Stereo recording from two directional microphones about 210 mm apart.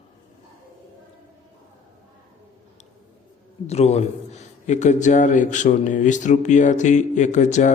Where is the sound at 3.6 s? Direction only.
30° left (ahead or behind).